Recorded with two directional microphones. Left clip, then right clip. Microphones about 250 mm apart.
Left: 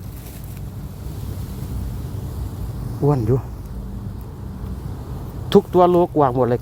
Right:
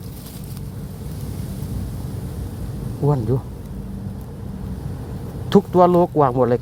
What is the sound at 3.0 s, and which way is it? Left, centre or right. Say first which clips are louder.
Speech: left 2 dB; centre.